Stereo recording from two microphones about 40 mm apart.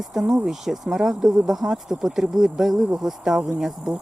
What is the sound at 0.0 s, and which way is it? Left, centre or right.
Speech, centre.